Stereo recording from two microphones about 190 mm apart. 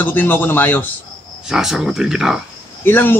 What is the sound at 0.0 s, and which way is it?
Speech, 10° left (ahead or behind).